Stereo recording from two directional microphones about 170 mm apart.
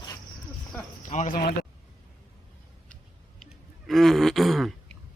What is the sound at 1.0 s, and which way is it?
Speech, 45° left (ahead or behind).